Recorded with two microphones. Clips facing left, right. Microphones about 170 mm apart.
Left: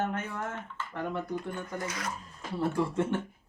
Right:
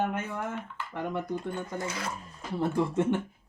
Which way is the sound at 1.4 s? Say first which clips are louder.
Right 2 dB; 25° right (ahead or behind).